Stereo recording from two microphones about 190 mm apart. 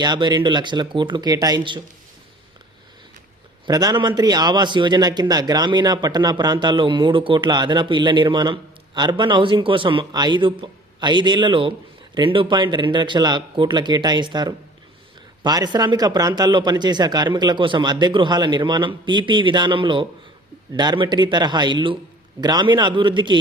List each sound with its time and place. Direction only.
0.0 s speech: 20° right (ahead or behind)
3.7 s speech: 20° right (ahead or behind)